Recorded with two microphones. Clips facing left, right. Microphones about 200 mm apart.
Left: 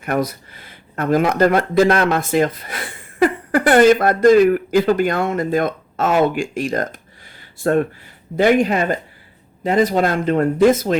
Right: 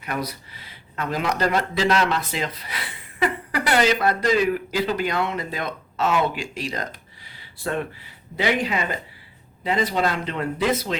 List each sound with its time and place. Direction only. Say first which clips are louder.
0.0 s speech: left 8 dB; 50° left (ahead or behind)
7.3 s a sound: left 10 dB; 50° left (ahead or behind)
8.4 s speech: left 9 dB; 50° left (ahead or behind)